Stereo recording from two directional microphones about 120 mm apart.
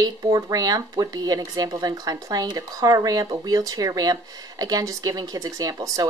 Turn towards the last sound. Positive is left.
turn(degrees=-30)  # may be behind; listen again after turning